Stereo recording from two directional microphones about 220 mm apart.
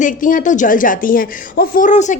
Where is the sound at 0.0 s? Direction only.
35° left (ahead or behind).